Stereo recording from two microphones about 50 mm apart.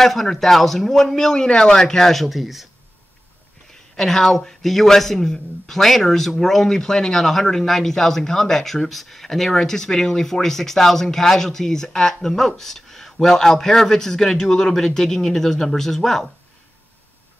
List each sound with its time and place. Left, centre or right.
0.0 s a man's voice: centre
3.7 s a man's voice: centre